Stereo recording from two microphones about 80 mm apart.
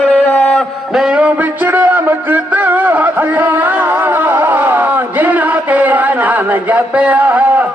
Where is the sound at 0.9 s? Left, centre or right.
Centre.